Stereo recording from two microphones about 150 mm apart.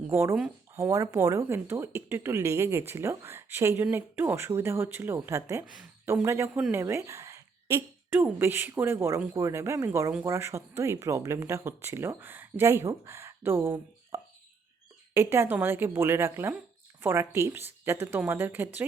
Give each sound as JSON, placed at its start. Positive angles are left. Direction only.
{"t": 0.1, "sound": "speech", "side_deg": -15}
{"t": 6.5, "sound": "speech", "side_deg": -5}
{"t": 6.7, "sound": "a sound", "side_deg": -20}
{"t": 8.2, "sound": "speech", "side_deg": -15}